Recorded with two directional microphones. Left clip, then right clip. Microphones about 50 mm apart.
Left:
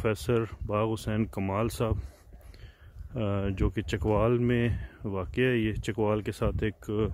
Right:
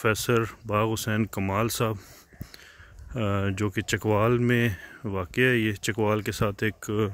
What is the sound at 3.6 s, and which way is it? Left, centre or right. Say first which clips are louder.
Speech: right 3 dB; left.